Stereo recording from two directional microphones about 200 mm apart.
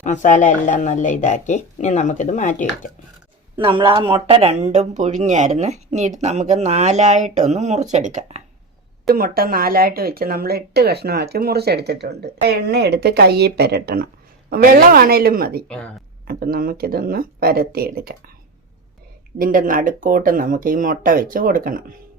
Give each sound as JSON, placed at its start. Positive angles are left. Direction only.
{"t": 0.0, "sound": "a woman's voice", "side_deg": 40}
{"t": 3.5, "sound": "speech", "side_deg": -25}
{"t": 9.0, "sound": "speech", "side_deg": -50}
{"t": 19.4, "sound": "speech", "side_deg": -45}